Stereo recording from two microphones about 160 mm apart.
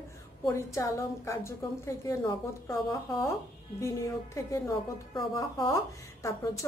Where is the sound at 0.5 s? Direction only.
20° left (ahead or behind).